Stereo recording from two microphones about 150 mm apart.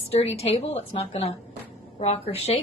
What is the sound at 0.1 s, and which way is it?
A woman's voice, 45° left (ahead or behind).